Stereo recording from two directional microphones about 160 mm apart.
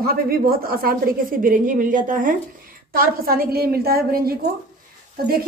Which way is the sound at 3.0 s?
70° right (ahead or behind).